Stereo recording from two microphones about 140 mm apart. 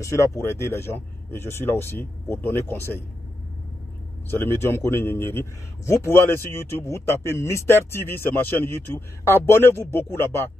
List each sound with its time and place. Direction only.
0.0 s a man's voice: 20° left (ahead or behind)
4.3 s a man's voice: 15° left (ahead or behind)